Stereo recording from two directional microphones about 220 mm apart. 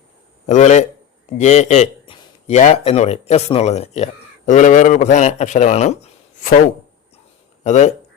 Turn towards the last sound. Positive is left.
turn(degrees=30)  # may be behind; listen again after turning